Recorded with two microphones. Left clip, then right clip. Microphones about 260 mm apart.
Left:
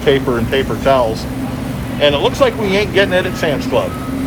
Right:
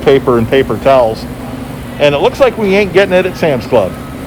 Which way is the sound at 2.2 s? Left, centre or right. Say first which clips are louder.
Right 4 dB; right.